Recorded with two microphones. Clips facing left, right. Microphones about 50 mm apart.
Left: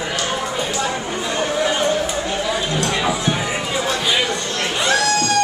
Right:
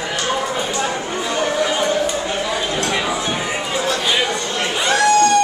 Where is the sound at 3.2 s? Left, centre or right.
Centre.